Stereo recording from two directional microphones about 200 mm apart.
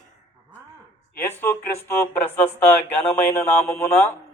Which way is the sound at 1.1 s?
10° left (ahead or behind).